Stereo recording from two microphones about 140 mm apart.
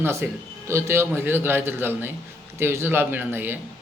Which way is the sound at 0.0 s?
20° right (ahead or behind).